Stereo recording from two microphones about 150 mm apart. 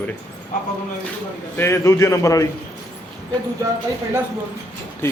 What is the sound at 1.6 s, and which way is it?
Speech, 20° left (ahead or behind).